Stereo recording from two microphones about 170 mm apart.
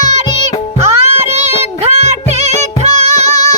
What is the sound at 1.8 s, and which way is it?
Music, 40° right (ahead or behind).